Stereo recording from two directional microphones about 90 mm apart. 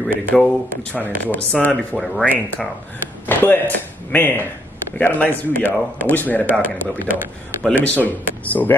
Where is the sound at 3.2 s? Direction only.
20° left (ahead or behind).